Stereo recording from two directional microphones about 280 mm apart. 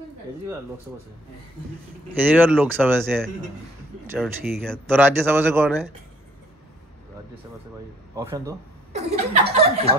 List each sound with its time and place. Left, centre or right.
2.1 s speech: centre
8.2 s speech: centre
8.9 s speech: right